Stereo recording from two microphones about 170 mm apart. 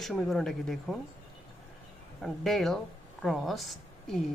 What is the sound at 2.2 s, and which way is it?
A woman's voice, centre (ahead or behind).